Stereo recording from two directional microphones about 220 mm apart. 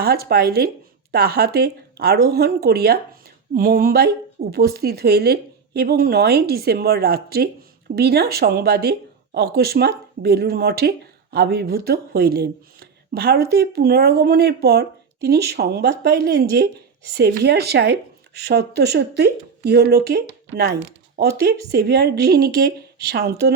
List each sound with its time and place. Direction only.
0.0 s a woman's voice: 45° right (ahead or behind)